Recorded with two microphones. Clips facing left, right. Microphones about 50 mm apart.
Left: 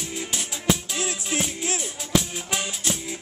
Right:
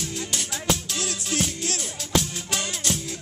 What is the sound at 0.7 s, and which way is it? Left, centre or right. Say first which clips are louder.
Music: left 3 dB; centre.